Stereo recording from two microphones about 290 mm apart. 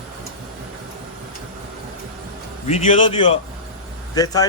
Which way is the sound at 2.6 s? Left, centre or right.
Centre.